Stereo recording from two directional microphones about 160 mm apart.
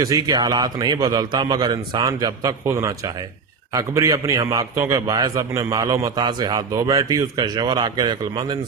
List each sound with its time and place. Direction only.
0.0 s a man's voice: 25° right (ahead or behind)